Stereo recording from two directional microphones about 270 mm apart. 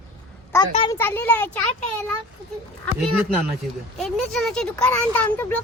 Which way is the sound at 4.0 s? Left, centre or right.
Centre.